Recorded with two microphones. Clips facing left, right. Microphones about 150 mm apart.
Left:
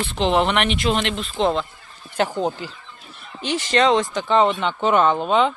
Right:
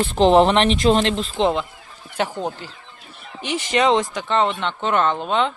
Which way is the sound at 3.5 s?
15° right (ahead or behind).